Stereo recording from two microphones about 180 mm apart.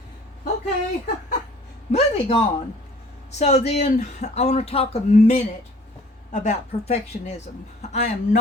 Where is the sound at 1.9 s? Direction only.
35° left (ahead or behind).